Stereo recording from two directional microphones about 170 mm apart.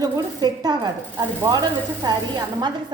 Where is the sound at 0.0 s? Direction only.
20° right (ahead or behind).